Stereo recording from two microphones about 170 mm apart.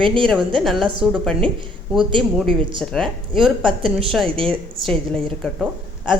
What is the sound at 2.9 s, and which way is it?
Speech, centre (ahead or behind).